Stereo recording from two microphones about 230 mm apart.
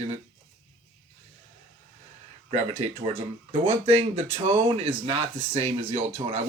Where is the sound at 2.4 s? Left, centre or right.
Right.